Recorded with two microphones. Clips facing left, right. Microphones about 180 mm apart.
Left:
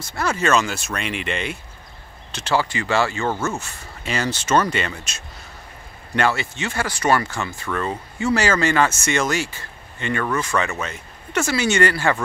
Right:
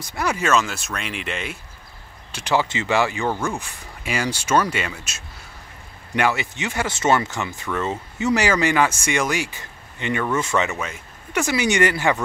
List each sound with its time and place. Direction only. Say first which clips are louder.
0.0 s speech: left 1 dB; 15° right (ahead or behind)
0.5 s speech: left 2 dB; centre (ahead or behind)
2.3 s speech: even; 15° right (ahead or behind)